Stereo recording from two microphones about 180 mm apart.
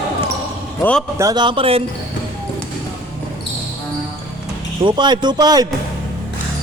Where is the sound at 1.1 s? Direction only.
20° right (ahead or behind).